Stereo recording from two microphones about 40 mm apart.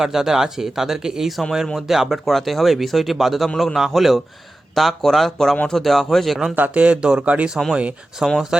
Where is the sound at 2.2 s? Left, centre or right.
Centre.